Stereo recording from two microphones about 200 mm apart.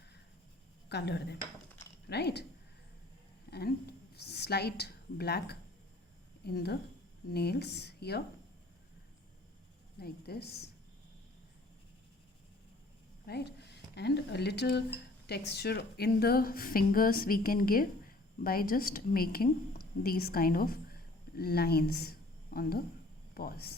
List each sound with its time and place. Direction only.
0.9 s speech: 55° left (ahead or behind)
3.5 s a woman's voice: 55° left (ahead or behind)
10.0 s a woman's voice: 50° left (ahead or behind)
13.2 s speech: 55° left (ahead or behind)